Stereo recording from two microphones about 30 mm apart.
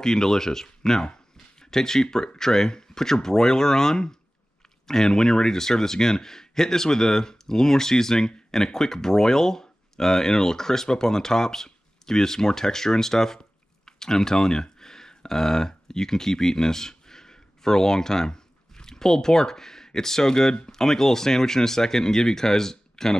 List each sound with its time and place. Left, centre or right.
0.0 s speech: centre